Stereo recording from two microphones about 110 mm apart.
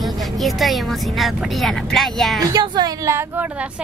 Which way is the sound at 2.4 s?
40° right (ahead or behind).